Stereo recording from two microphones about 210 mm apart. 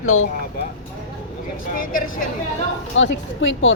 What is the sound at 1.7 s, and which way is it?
Speech, 40° left (ahead or behind).